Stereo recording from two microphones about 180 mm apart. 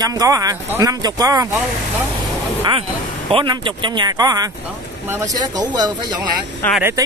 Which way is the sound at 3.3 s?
30° right (ahead or behind).